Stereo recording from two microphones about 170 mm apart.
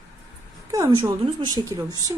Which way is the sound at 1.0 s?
25° right (ahead or behind).